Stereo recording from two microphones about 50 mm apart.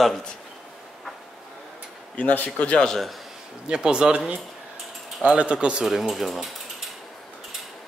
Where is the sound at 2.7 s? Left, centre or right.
Centre.